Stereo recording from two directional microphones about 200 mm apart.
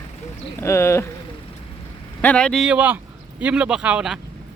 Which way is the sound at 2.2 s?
5° left (ahead or behind).